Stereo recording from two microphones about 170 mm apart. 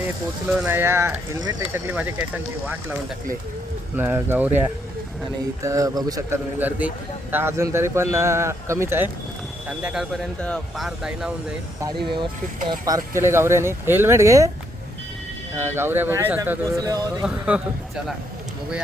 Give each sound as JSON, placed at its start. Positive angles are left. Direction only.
{"t": 0.4, "sound": "a man's voice", "side_deg": -10}
{"t": 3.9, "sound": "a man's voice", "side_deg": -10}
{"t": 13.1, "sound": "a man's voice", "side_deg": -15}
{"t": 15.5, "sound": "a man's voice", "side_deg": -15}
{"t": 17.2, "sound": "speech", "side_deg": -5}